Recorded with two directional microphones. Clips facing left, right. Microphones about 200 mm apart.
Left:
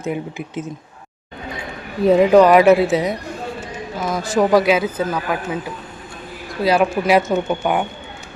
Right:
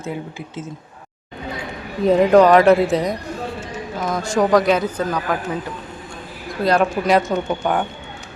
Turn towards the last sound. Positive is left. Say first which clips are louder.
# left 1 dB
turn(degrees=10)  # may be behind; listen again after turning